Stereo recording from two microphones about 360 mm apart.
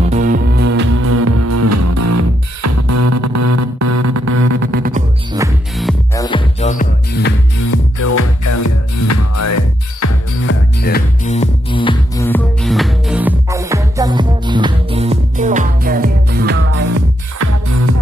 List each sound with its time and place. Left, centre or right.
0.0 s music: right
1.0 s music: right
4.5 s music: right
5.3 s music: centre
6.2 s music: centre
7.6 s music: left
10.4 s music: left; by 17.0 s right
17.4 s music: right